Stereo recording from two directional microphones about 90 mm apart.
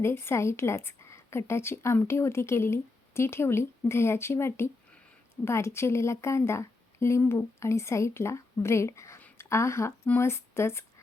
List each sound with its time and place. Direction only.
0.0 s a woman's voice: 25° left (ahead or behind)